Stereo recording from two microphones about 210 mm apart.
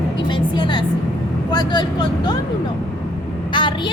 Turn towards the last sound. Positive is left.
turn(degrees=25)  # may be behind; listen again after turning